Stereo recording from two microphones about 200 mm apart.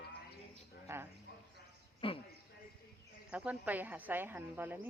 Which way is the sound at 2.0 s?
25° left (ahead or behind).